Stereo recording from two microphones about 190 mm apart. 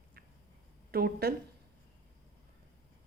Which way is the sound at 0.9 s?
55° right (ahead or behind).